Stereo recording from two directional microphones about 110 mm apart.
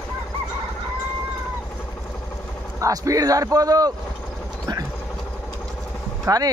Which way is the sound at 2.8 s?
30° right (ahead or behind).